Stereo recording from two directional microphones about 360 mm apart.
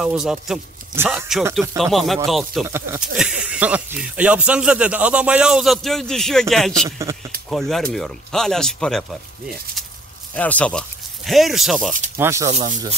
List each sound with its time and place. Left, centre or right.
0.0 s a man's voice: centre
10.3 s speech: centre
12.4 s speech: centre